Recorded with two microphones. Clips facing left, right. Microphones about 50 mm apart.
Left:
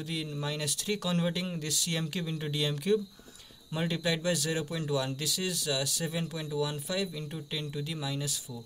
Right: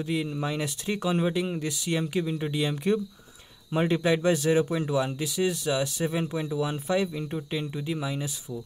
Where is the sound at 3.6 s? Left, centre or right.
Right.